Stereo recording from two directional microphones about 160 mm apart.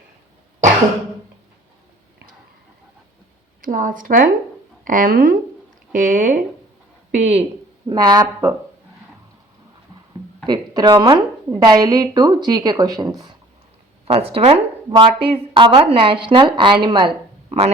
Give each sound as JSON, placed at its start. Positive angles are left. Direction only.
{"t": 3.6, "sound": "speech", "side_deg": -55}
{"t": 7.1, "sound": "speech", "side_deg": -45}
{"t": 7.9, "sound": "speech", "side_deg": -25}
{"t": 10.4, "sound": "speech", "side_deg": -25}
{"t": 14.1, "sound": "speech", "side_deg": -35}